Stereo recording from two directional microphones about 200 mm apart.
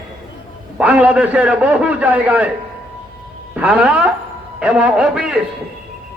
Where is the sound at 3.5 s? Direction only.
5° right (ahead or behind).